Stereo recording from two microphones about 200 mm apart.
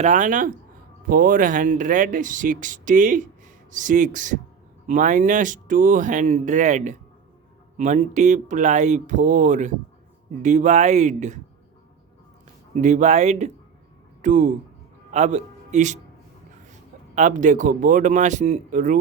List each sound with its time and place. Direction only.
0.0 s speech: 40° right (ahead or behind)
12.7 s a man's voice: 35° right (ahead or behind)
17.2 s speech: 40° right (ahead or behind)